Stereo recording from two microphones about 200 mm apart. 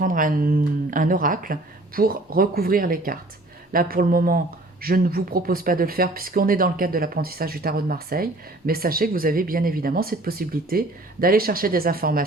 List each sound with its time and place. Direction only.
0.0 s speech: 45° right (ahead or behind)